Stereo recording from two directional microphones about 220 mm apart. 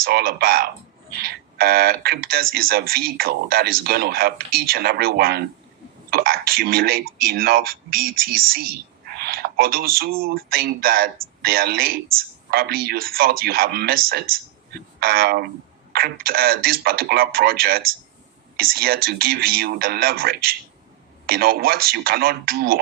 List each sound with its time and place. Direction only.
0.0 s speech: 45° right (ahead or behind)